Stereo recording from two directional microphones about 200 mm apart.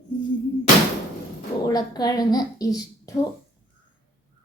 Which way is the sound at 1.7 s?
20° left (ahead or behind).